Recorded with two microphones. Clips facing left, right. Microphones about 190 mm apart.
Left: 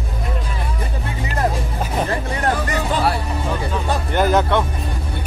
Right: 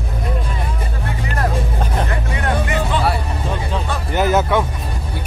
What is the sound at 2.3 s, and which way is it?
Music, 40° left (ahead or behind).